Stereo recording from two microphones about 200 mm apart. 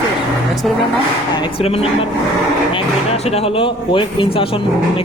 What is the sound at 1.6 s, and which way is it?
Speech, 30° left (ahead or behind).